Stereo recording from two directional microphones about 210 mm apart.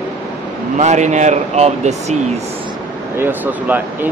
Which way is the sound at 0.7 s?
35° right (ahead or behind).